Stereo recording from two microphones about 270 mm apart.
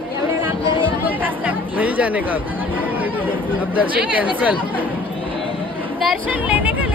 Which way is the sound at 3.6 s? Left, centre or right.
Centre.